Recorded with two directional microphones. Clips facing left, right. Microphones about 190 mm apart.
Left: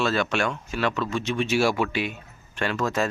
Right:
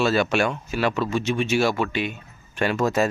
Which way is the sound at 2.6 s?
10° right (ahead or behind).